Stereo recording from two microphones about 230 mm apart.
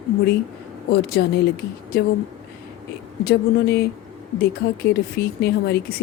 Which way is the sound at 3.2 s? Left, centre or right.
Left.